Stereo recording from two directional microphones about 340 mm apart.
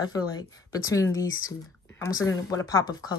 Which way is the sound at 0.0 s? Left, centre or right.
Centre.